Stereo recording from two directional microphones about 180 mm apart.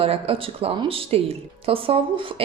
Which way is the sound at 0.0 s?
35° right (ahead or behind).